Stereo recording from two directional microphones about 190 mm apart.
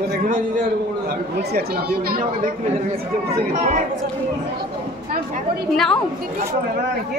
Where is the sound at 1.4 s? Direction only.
55° right (ahead or behind).